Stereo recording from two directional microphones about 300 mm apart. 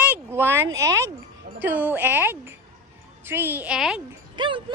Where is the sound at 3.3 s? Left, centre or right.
Centre.